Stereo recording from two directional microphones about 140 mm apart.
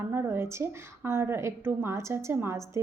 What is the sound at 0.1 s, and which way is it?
A woman's voice, 15° right (ahead or behind).